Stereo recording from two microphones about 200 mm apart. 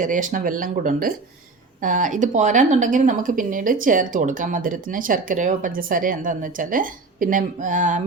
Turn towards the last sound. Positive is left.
turn(degrees=-40)  # may be behind; listen again after turning